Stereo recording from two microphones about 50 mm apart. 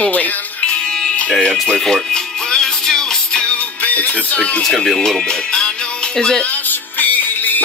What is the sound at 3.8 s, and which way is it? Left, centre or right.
Music, left.